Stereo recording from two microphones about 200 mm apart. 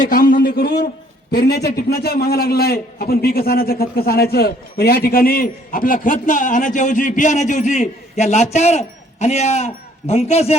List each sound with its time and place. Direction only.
0.0 s a man's voice: 40° left (ahead or behind)